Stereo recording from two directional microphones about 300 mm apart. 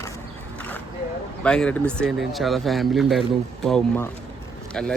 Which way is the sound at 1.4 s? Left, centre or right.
Centre.